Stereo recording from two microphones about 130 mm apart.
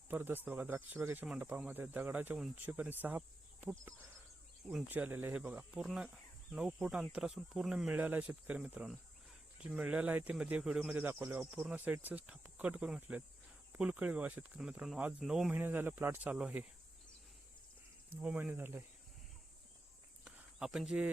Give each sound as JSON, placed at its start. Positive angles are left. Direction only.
{"t": 0.1, "sound": "speech", "side_deg": -15}
{"t": 15.6, "sound": "speech", "side_deg": -15}
{"t": 18.2, "sound": "speech", "side_deg": -10}
{"t": 20.2, "sound": "cricket", "side_deg": -5}